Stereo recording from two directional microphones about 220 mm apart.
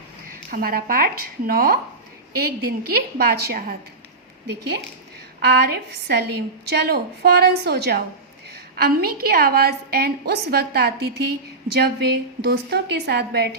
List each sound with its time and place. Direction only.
0.5 s a woman's voice: 40° right (ahead or behind)
5.4 s a woman's voice: 50° right (ahead or behind)